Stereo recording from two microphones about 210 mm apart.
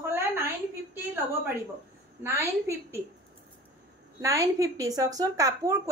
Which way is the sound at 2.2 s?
15° right (ahead or behind).